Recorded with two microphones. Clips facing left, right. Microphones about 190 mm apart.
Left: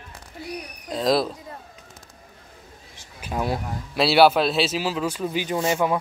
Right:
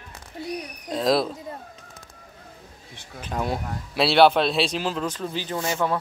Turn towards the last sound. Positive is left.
turn(degrees=15)  # may be behind; listen again after turning